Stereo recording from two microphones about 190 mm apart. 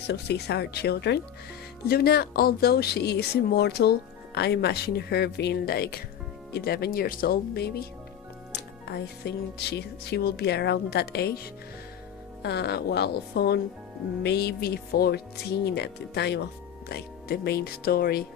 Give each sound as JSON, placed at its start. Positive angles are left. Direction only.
{"t": 0.1, "sound": "speech", "side_deg": 60}
{"t": 8.9, "sound": "speech", "side_deg": 60}
{"t": 12.4, "sound": "speech", "side_deg": 60}